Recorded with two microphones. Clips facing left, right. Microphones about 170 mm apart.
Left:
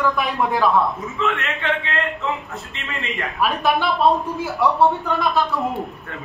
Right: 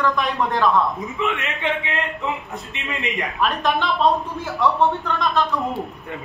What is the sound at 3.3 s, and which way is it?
Speech, 5° left (ahead or behind).